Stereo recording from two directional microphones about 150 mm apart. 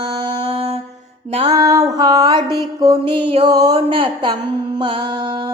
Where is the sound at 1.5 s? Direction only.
25° right (ahead or behind).